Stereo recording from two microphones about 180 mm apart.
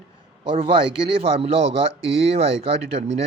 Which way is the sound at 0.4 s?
30° right (ahead or behind).